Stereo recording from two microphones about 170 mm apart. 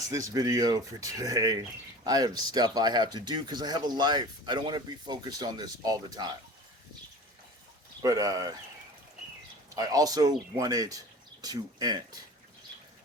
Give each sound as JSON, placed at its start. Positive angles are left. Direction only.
{"t": 0.1, "sound": "speech", "side_deg": -20}
{"t": 8.0, "sound": "speech", "side_deg": -20}
{"t": 9.7, "sound": "speech", "side_deg": -20}